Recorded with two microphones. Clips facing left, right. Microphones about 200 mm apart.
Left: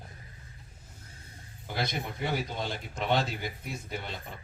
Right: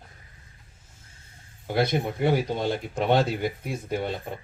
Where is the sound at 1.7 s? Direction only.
55° right (ahead or behind).